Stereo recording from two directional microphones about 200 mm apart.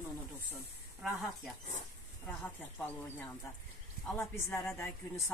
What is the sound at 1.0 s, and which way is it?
Speech, centre (ahead or behind).